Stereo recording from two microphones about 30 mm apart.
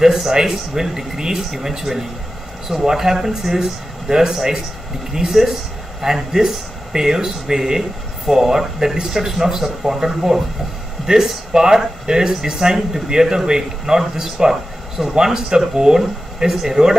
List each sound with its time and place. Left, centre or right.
0.5 s speech: centre
14.2 s speech: centre